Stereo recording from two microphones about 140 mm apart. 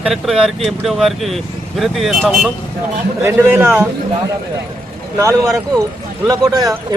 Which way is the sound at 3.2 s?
15° right (ahead or behind).